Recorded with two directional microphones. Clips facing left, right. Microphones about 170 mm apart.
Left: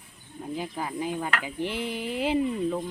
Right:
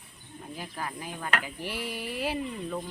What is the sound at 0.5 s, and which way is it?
Speech, 20° left (ahead or behind).